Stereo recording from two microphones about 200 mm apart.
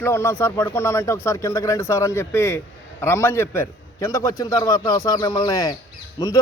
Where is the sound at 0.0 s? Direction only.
10° left (ahead or behind).